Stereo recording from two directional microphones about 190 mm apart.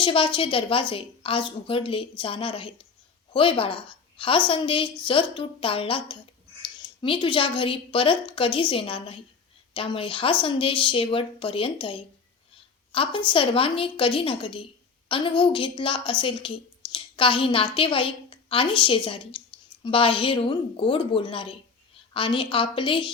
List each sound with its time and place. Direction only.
0.0 s a woman's voice: 25° left (ahead or behind)